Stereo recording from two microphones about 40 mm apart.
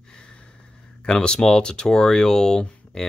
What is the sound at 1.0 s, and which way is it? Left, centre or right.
Speech, left.